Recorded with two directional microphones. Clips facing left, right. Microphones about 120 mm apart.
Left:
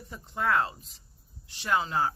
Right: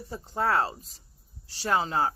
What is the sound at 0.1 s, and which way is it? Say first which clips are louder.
Speech: right 1 dB; 35° right (ahead or behind).